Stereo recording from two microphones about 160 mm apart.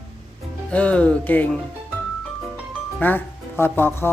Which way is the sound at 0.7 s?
10° left (ahead or behind).